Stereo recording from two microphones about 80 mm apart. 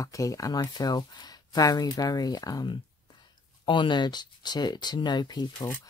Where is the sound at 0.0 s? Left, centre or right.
Left.